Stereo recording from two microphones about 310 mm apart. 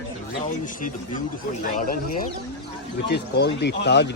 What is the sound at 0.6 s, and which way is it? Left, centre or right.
Speech, left.